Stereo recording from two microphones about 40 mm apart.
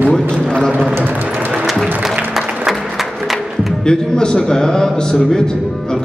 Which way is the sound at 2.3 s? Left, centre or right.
Centre.